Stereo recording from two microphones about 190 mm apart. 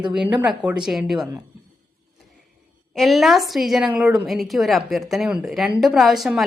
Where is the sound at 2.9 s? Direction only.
Centre (ahead or behind).